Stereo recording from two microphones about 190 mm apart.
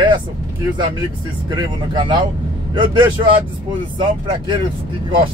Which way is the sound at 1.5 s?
25° right (ahead or behind).